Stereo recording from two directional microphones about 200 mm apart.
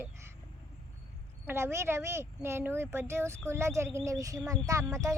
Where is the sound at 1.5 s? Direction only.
10° right (ahead or behind).